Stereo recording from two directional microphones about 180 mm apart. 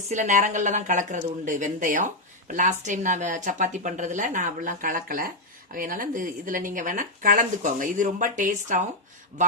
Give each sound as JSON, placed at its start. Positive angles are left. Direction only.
{"t": 0.1, "sound": "speech", "side_deg": -45}